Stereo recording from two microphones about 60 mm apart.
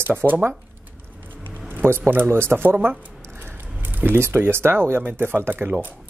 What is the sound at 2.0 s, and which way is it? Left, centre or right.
Speech, right.